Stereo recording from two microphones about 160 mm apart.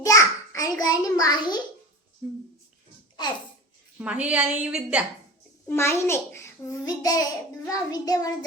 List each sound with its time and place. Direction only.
0.0 s a sound: 20° left (ahead or behind)
2.2 s a woman's voice: 5° right (ahead or behind)
3.9 s a woman's voice: 10° right (ahead or behind)
5.6 s a child's voice: 15° left (ahead or behind)